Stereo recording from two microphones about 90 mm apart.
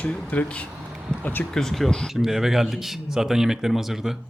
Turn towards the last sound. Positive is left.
turn(degrees=-5)  # may be behind; listen again after turning